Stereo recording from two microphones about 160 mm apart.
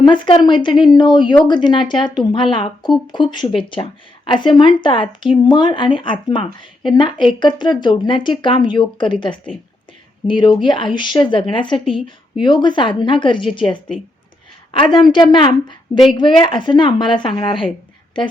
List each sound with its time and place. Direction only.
0.0 s a woman's voice: 30° left (ahead or behind)
13.7 s speech: 5° left (ahead or behind)
14.7 s speech: 30° left (ahead or behind)